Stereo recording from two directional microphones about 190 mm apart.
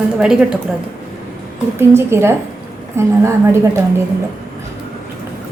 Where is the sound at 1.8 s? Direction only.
15° right (ahead or behind).